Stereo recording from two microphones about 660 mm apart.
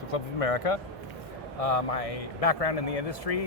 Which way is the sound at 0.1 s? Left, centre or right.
Left.